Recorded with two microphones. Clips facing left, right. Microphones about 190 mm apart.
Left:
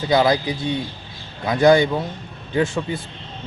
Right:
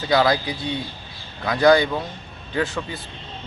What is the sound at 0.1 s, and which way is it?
A man's voice, 20° left (ahead or behind).